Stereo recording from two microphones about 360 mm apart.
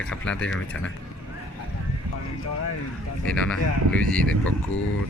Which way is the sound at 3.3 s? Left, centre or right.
Centre.